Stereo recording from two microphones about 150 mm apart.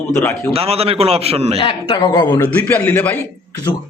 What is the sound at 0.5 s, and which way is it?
A man's voice, 40° right (ahead or behind).